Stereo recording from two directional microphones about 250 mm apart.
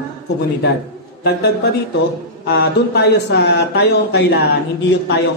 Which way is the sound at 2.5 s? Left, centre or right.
Left.